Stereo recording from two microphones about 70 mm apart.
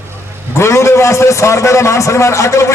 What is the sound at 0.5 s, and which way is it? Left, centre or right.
A man's voice, left.